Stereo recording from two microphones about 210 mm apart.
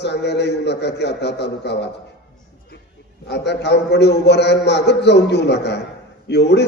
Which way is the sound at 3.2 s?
55° left (ahead or behind).